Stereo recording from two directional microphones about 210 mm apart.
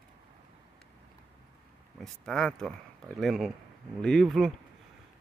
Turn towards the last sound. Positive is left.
turn(degrees=0)  # may be behind; listen again after turning